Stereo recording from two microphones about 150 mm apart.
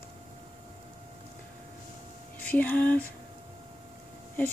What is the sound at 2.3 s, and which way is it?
Music, 10° left (ahead or behind).